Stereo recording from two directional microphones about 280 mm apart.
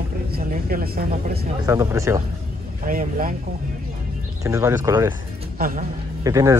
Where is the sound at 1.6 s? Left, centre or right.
Centre.